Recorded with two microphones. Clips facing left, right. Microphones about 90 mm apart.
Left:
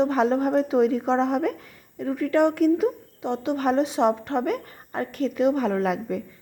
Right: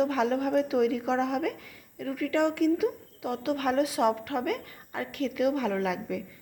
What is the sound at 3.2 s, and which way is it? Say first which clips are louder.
A woman's voice: left 4 dB; 25° left (ahead or behind).